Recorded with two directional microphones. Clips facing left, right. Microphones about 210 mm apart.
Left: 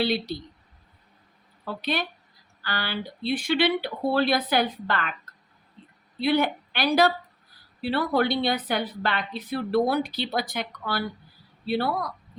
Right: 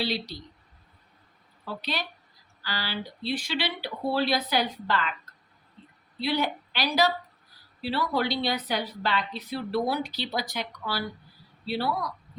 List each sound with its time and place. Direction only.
0.0 s a woman's voice: 55° left (ahead or behind)
1.6 s a woman's voice: 55° left (ahead or behind)
6.1 s a woman's voice: 55° left (ahead or behind)